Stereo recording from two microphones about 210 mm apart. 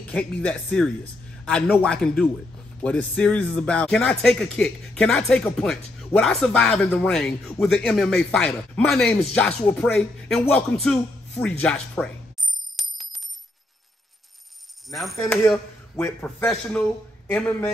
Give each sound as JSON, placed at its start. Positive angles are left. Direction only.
{"t": 0.0, "sound": "speech", "side_deg": 5}
{"t": 12.7, "sound": "coin", "side_deg": 0}
{"t": 14.9, "sound": "a man's voice", "side_deg": 0}